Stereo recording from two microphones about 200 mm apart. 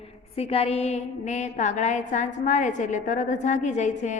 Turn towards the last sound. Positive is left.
turn(degrees=35)  # may be behind; listen again after turning